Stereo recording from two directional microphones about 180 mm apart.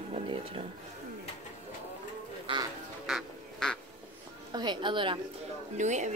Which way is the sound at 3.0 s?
Centre (ahead or behind).